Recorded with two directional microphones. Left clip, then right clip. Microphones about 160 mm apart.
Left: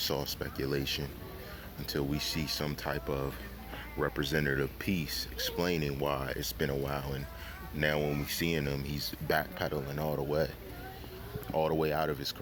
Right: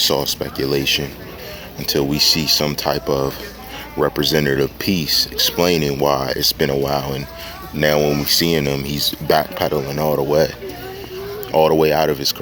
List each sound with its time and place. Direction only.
0.0 s speech: 30° right (ahead or behind)
11.5 s speech: 45° right (ahead or behind)